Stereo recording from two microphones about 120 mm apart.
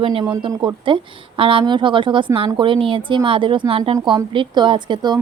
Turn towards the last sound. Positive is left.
turn(degrees=-40)  # may be behind; listen again after turning